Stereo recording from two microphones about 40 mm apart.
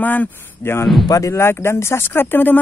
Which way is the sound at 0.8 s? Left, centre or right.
Centre.